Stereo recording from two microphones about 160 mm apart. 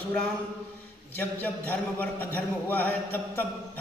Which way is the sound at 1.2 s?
10° left (ahead or behind).